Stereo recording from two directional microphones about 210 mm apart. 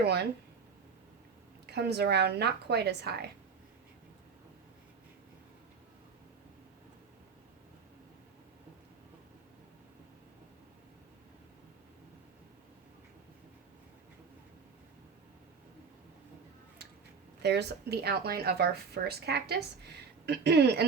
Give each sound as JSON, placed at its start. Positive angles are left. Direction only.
{"t": 0.0, "sound": "speech", "side_deg": -50}
{"t": 1.6, "sound": "speech", "side_deg": -50}
{"t": 17.4, "sound": "speech", "side_deg": -55}